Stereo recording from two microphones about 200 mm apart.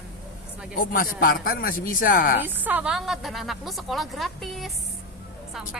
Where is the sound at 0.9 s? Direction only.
45° left (ahead or behind).